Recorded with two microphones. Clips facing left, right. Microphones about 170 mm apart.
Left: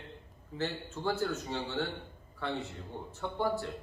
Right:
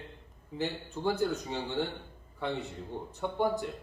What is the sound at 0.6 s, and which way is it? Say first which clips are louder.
Speech: right 2 dB; 15° right (ahead or behind).